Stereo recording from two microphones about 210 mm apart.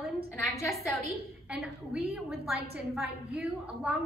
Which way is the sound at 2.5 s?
50° right (ahead or behind).